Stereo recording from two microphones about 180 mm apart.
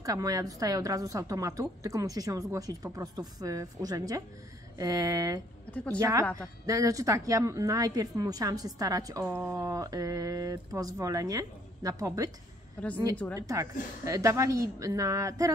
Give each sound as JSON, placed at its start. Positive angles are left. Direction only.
{"t": 0.0, "sound": "a woman's voice", "side_deg": -20}
{"t": 5.7, "sound": "a woman's voice", "side_deg": 5}
{"t": 5.9, "sound": "a woman's voice", "side_deg": -20}
{"t": 13.4, "sound": "a woman's voice", "side_deg": -20}